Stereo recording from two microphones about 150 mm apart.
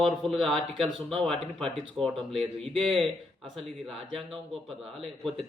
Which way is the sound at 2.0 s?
40° right (ahead or behind).